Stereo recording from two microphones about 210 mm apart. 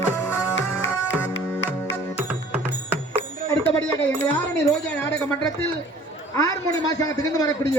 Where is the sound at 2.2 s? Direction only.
10° right (ahead or behind).